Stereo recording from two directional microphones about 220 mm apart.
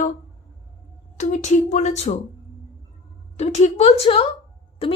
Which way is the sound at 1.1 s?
35° left (ahead or behind).